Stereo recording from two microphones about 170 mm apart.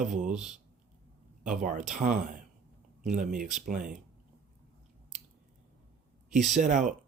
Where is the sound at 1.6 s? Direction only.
45° right (ahead or behind).